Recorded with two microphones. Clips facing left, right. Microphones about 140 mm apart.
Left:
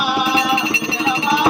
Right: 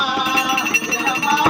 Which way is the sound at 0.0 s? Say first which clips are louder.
Left 2 dB; 5° left (ahead or behind).